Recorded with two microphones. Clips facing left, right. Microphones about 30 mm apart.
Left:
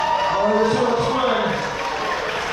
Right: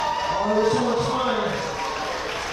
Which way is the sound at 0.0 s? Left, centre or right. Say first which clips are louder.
Left 5 dB; centre.